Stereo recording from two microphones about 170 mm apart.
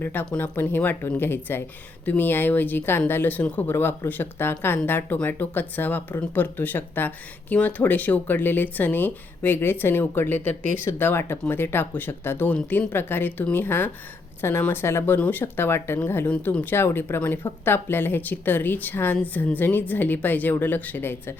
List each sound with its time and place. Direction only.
0.0 s speech: 10° left (ahead or behind)